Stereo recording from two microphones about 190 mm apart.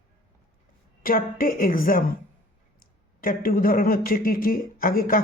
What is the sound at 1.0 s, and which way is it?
Speech, 45° left (ahead or behind).